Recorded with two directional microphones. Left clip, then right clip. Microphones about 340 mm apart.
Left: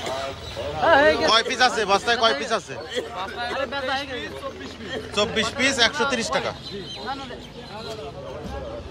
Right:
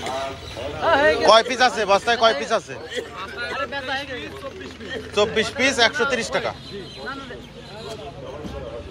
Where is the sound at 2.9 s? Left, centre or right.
Left.